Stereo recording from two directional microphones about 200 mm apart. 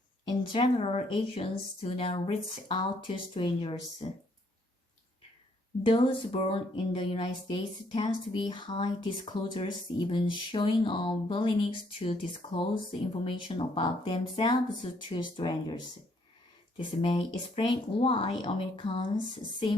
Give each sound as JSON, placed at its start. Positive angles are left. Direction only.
{"t": 0.3, "sound": "speech", "side_deg": 25}
{"t": 5.8, "sound": "speech", "side_deg": 25}